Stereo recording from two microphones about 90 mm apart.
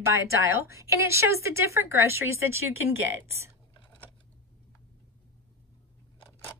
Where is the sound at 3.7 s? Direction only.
65° left (ahead or behind).